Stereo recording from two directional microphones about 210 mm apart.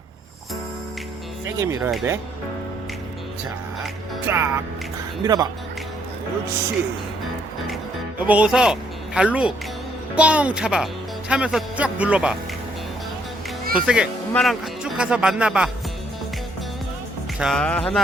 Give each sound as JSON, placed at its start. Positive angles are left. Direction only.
{"t": 1.5, "sound": "speech", "side_deg": -15}
{"t": 4.3, "sound": "speech", "side_deg": -10}
{"t": 8.2, "sound": "a man's voice", "side_deg": -5}
{"t": 13.8, "sound": "speech", "side_deg": -5}
{"t": 17.4, "sound": "speech", "side_deg": 5}